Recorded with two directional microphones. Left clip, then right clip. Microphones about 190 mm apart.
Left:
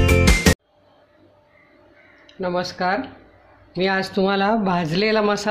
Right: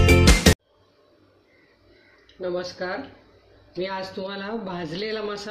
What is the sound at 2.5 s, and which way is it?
A man's voice, 60° left (ahead or behind).